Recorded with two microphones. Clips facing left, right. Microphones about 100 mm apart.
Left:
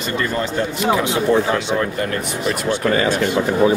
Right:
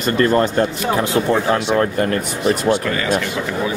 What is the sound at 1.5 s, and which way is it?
Speech, 40° right (ahead or behind).